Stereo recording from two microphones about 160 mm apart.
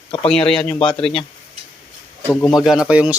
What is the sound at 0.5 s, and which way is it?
Speech, 5° left (ahead or behind).